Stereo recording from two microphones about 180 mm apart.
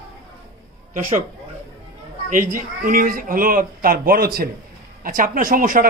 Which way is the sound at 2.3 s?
50° right (ahead or behind).